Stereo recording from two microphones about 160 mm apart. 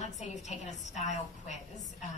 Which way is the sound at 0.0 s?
45° left (ahead or behind).